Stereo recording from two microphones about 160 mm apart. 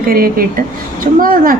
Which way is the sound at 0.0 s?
65° right (ahead or behind).